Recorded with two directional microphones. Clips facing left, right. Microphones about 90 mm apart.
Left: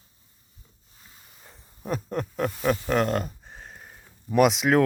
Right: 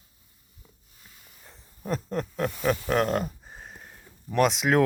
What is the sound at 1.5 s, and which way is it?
Speech, 5° left (ahead or behind).